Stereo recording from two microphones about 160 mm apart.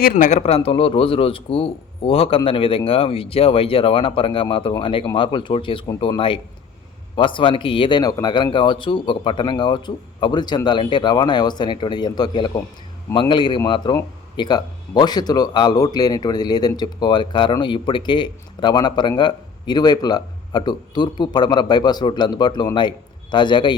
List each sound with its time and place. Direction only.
0.0 s speech: 55° left (ahead or behind); by 23.7 s 30° left (ahead or behind)